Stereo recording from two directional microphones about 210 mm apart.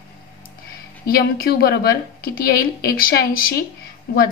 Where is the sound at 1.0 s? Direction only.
45° left (ahead or behind).